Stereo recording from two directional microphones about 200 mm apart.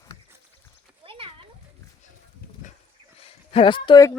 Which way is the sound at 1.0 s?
25° right (ahead or behind).